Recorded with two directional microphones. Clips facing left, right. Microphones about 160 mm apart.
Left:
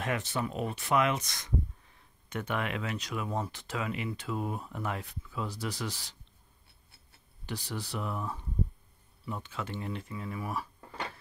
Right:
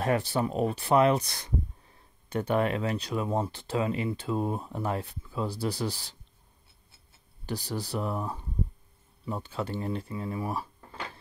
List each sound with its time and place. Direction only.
0.0 s speech: 35° right (ahead or behind)
7.4 s speech: 35° right (ahead or behind)